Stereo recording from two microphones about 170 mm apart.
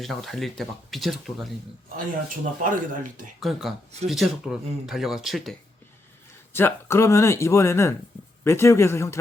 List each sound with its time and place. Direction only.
0.0 s speech: centre (ahead or behind)
2.3 s speech: 50° right (ahead or behind)
3.4 s speech: centre (ahead or behind)
6.5 s speech: 15° left (ahead or behind)